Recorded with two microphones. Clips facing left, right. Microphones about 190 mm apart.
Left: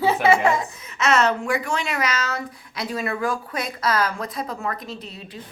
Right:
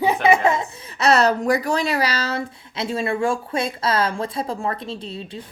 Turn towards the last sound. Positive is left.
turn(degrees=-30)  # may be behind; listen again after turning